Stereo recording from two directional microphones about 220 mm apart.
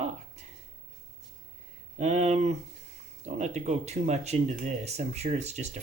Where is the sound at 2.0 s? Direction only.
30° right (ahead or behind).